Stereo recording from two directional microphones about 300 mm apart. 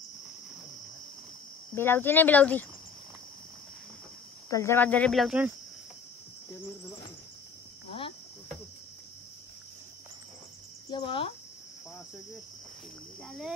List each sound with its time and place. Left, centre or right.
1.8 s speech: centre
4.5 s speech: centre
10.9 s speech: centre
13.2 s speech: centre